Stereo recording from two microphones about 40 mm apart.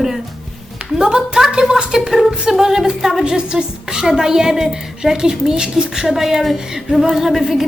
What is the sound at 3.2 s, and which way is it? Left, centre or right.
A woman's voice, right.